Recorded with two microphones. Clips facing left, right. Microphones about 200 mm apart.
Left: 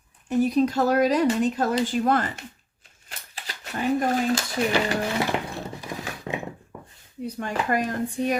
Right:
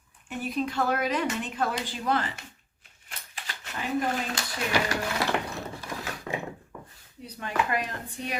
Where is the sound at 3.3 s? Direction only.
40° left (ahead or behind).